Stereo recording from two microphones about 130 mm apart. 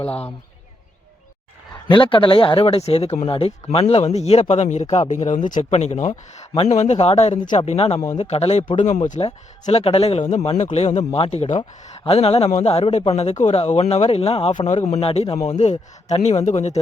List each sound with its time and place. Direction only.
1.9 s a man's voice: 40° left (ahead or behind)
8.7 s a man's voice: 65° left (ahead or behind)